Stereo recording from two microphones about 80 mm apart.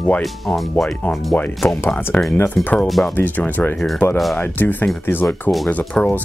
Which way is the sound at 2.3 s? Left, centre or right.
Left.